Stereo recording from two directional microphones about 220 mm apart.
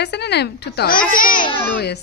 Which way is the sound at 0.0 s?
50° left (ahead or behind).